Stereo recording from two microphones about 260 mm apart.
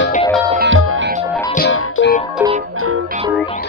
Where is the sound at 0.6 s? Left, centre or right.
Right.